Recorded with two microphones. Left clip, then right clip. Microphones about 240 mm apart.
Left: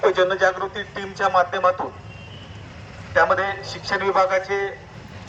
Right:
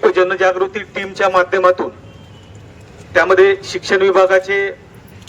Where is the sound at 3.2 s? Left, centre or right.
Right.